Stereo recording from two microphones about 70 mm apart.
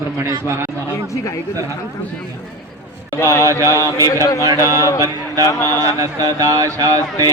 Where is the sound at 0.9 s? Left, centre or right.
Left.